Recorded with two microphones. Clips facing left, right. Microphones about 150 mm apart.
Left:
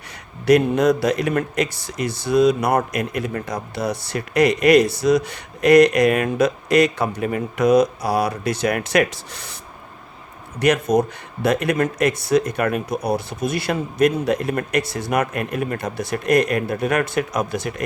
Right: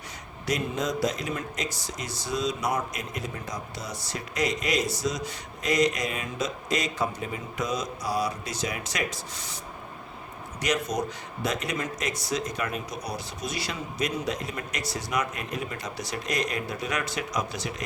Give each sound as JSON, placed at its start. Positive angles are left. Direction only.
{"t": 0.4, "sound": "a man's voice", "side_deg": 65}
{"t": 10.6, "sound": "a man's voice", "side_deg": 55}